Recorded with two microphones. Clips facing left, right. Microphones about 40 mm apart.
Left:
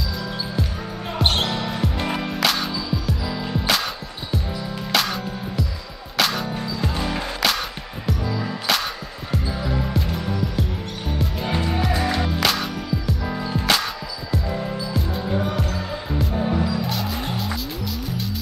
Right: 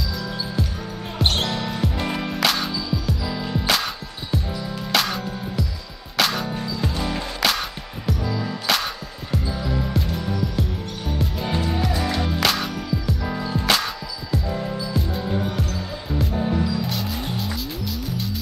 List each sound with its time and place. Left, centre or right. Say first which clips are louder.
1.1 s music: left 1 dB; centre
7.3 s music: right 1 dB; centre
11.4 s music: left 1 dB; centre